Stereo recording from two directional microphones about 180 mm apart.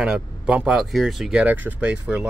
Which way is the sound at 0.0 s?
5° right (ahead or behind).